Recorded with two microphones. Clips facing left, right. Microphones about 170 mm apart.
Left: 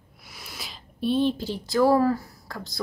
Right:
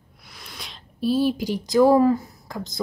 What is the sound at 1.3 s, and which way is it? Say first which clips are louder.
A woman's voice: right 5 dB; 15° right (ahead or behind).